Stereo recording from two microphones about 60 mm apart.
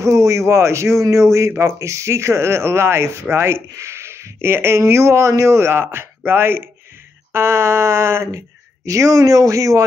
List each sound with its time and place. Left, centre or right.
0.0 s a man's voice: right
8.8 s speech: right